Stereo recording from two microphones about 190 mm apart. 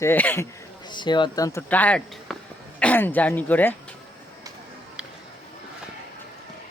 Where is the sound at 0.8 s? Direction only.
25° left (ahead or behind).